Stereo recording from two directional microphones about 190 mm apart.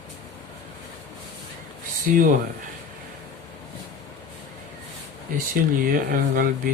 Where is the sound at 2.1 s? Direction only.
45° right (ahead or behind).